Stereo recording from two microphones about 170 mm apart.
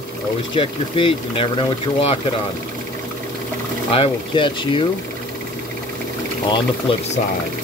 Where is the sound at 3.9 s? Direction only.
30° left (ahead or behind).